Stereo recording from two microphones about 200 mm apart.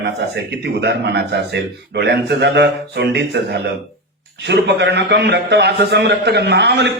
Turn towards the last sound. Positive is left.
turn(degrees=-60)  # may be behind; listen again after turning